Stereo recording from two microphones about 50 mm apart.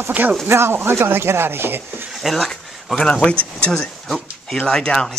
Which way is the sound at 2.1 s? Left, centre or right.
Centre.